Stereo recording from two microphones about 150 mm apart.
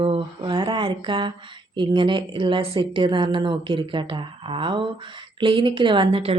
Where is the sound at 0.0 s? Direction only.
35° right (ahead or behind).